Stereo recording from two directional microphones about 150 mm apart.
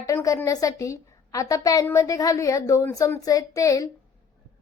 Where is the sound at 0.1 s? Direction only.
20° left (ahead or behind).